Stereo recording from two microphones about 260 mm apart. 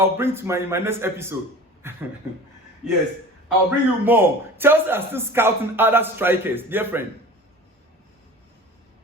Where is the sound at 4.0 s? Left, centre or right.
Centre.